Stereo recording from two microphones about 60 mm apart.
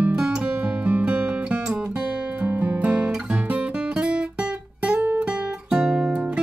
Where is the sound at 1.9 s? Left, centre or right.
Right.